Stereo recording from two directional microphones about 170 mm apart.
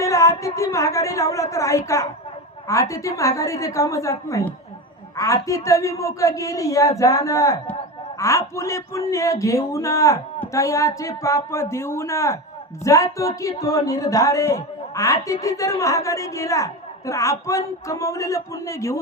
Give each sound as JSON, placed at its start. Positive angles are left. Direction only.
{"t": 0.0, "sound": "speech", "side_deg": 15}